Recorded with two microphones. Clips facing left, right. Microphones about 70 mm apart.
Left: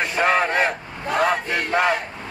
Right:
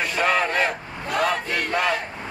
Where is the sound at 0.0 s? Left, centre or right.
Left.